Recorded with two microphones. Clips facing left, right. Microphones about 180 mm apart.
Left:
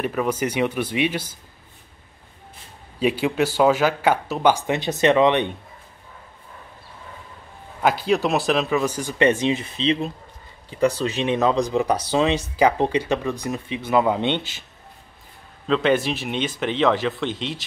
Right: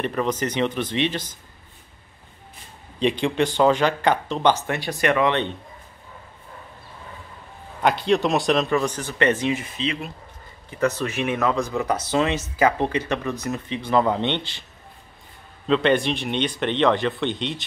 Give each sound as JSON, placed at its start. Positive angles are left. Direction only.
{"t": 0.0, "sound": "speech", "side_deg": 5}
{"t": 3.0, "sound": "speech", "side_deg": 5}
{"t": 7.8, "sound": "speech", "side_deg": 5}
{"t": 9.5, "sound": "speech", "side_deg": 30}
{"t": 11.0, "sound": "speech", "side_deg": 20}
{"t": 15.6, "sound": "speech", "side_deg": 0}